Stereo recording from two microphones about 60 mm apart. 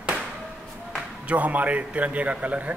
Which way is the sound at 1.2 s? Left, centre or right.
Right.